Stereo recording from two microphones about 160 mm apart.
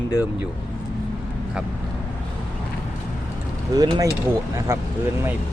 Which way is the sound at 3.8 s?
25° right (ahead or behind).